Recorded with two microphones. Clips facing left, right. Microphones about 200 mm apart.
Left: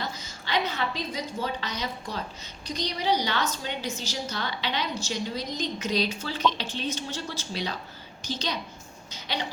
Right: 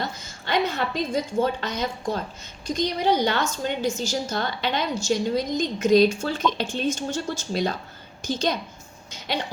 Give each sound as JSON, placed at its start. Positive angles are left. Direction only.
{"t": 0.0, "sound": "a woman's voice", "side_deg": -50}